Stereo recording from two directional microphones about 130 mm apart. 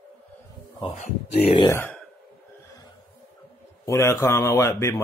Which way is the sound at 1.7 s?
15° left (ahead or behind).